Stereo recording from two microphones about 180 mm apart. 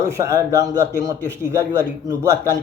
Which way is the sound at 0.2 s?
15° right (ahead or behind).